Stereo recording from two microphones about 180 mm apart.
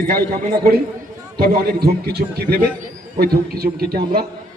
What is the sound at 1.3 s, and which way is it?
A man's voice, 60° right (ahead or behind).